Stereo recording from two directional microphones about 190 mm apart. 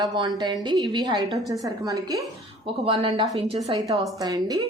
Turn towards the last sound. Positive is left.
turn(degrees=-20)  # may be behind; listen again after turning